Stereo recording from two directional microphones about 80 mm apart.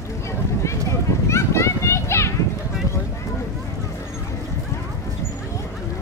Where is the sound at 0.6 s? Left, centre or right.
Left.